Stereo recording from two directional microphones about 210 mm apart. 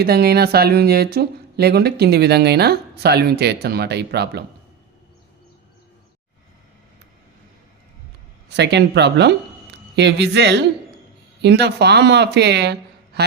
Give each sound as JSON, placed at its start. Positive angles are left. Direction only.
{"t": 0.0, "sound": "speech", "side_deg": -50}
{"t": 8.4, "sound": "speech", "side_deg": -55}